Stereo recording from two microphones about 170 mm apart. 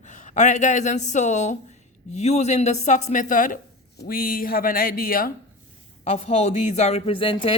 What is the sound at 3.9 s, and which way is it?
Speech, 65° left (ahead or behind).